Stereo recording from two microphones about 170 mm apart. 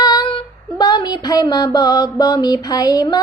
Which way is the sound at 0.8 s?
25° left (ahead or behind).